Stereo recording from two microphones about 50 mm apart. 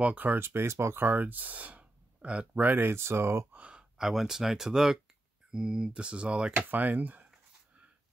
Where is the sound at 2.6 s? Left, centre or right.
Right.